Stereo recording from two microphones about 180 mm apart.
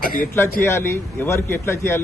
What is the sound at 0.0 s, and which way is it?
Speech, 55° left (ahead or behind).